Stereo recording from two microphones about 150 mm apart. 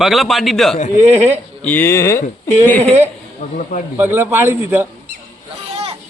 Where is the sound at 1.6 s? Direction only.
15° left (ahead or behind).